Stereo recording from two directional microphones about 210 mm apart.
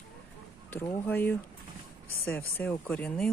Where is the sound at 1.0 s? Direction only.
10° left (ahead or behind).